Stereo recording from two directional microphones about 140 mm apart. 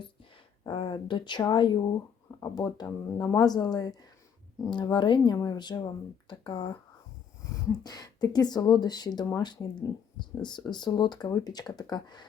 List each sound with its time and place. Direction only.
0.6 s speech: 35° left (ahead or behind)
7.9 s speech: 30° left (ahead or behind)